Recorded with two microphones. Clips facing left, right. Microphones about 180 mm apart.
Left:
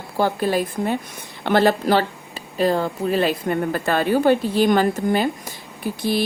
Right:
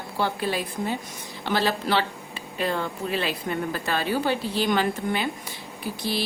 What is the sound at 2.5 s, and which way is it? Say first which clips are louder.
A woman's voice: left 7 dB; 35° left (ahead or behind).